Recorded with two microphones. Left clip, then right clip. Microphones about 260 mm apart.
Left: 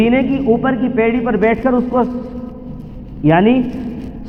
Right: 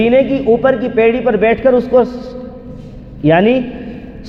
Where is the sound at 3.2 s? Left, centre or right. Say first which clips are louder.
Right 2 dB; right.